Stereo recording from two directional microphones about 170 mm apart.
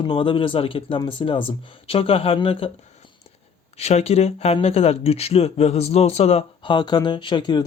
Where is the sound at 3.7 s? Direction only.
40° left (ahead or behind).